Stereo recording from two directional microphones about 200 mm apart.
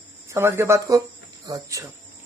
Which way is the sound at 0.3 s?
15° right (ahead or behind).